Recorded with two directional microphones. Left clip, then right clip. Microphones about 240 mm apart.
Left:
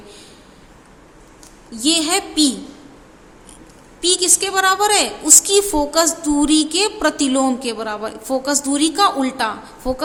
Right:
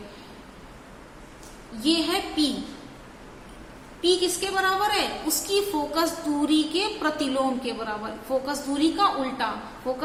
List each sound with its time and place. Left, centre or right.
1.8 s a woman's voice: left
4.0 s a woman's voice: left